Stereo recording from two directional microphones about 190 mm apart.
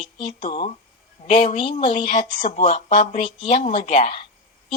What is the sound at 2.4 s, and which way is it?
Speech, 40° left (ahead or behind).